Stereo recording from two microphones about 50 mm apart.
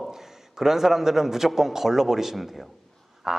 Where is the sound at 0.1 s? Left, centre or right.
Centre.